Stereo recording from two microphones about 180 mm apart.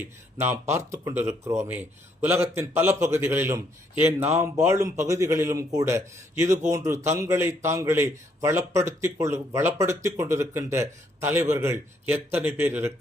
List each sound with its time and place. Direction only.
0.0 s speech: 10° right (ahead or behind)